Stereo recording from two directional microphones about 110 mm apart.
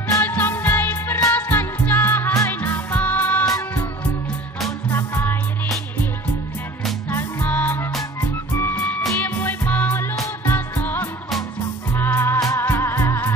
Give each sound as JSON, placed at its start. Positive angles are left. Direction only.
{"t": 0.2, "sound": "music", "side_deg": 20}
{"t": 4.9, "sound": "music", "side_deg": 20}
{"t": 7.1, "sound": "music", "side_deg": 20}
{"t": 12.4, "sound": "music", "side_deg": 30}
{"t": 12.6, "sound": "music", "side_deg": 20}